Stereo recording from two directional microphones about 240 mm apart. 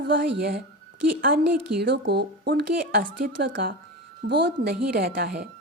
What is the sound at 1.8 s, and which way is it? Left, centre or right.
Speech, right.